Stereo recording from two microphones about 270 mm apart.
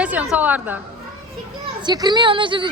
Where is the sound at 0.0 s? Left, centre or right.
Centre.